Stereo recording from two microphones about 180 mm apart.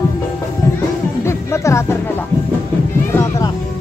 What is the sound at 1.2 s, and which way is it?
Music, 15° left (ahead or behind).